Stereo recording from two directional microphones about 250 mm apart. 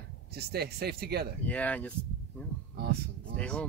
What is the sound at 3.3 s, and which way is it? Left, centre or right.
Speech, centre.